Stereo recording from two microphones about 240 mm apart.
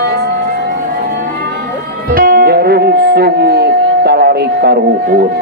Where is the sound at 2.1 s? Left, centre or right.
Right.